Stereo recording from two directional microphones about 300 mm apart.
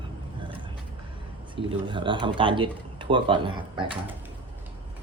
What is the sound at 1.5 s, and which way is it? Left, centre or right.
Speech, centre.